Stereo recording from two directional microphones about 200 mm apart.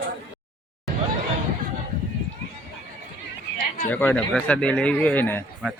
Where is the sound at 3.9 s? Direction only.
10° left (ahead or behind).